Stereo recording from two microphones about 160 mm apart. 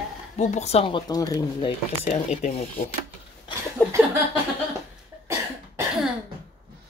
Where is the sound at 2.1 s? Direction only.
55° left (ahead or behind).